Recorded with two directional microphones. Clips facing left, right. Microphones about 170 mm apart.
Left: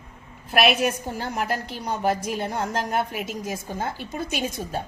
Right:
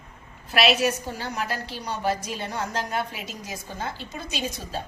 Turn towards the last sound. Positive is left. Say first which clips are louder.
# left 3 dB
turn(degrees=50)  # may be behind; listen again after turning